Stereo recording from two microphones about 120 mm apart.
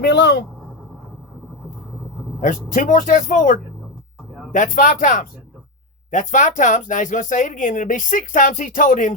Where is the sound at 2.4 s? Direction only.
90° left.